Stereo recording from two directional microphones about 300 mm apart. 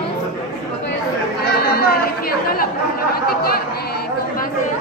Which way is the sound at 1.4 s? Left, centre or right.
Left.